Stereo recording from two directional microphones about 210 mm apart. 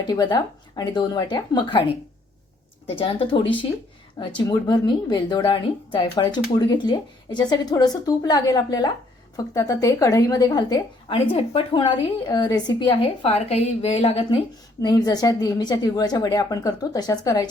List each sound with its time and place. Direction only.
0.0 s speech: 20° left (ahead or behind)
2.8 s a woman's voice: 25° left (ahead or behind)